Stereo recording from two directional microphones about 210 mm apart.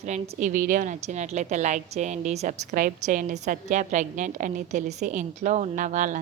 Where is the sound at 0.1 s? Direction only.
35° right (ahead or behind).